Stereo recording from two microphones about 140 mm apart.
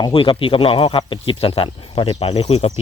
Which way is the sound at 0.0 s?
40° left (ahead or behind).